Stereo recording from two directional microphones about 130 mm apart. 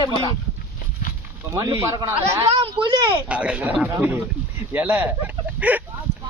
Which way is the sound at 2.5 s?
40° right (ahead or behind).